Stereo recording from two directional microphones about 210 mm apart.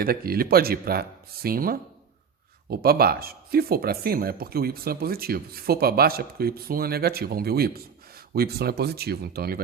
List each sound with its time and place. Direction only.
0.0 s speech: 45° right (ahead or behind)